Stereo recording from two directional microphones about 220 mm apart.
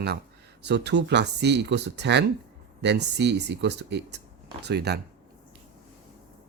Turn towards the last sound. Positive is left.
turn(degrees=-50)  # may be behind; listen again after turning